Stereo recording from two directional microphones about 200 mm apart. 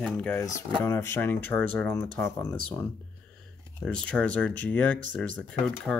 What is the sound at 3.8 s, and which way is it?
Speech, 5° left (ahead or behind).